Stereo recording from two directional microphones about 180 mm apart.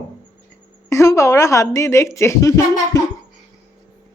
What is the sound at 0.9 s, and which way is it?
A woman's voice, 15° left (ahead or behind).